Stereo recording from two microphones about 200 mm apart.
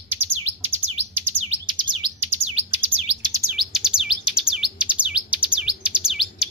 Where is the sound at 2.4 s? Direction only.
30° right (ahead or behind).